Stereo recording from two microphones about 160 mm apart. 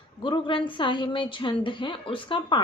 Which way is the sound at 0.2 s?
30° left (ahead or behind).